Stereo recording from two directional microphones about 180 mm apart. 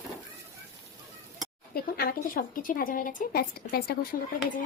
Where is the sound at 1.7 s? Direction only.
55° left (ahead or behind).